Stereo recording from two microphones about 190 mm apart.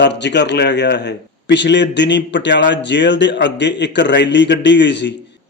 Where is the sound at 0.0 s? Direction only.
65° left (ahead or behind).